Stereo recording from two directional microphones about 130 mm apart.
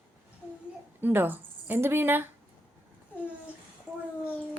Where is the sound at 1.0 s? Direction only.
15° right (ahead or behind).